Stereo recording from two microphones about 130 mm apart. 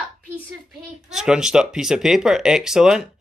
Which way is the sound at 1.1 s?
5° right (ahead or behind).